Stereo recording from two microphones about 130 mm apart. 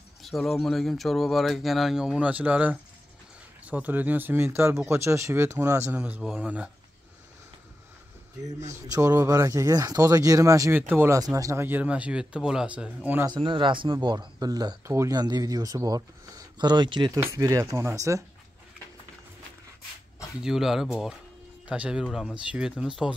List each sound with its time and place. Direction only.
0.2 s speech: centre (ahead or behind)
8.5 s a man's voice: 60° right (ahead or behind)
8.9 s speech: 25° right (ahead or behind)
11.1 s speech: 25° right (ahead or behind)
13.3 s speech: 40° right (ahead or behind)
17.4 s speech: 25° right (ahead or behind)
20.4 s speech: 5° right (ahead or behind)